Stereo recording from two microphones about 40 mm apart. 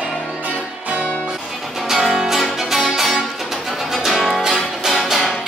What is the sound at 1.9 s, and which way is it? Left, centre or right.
Music, centre.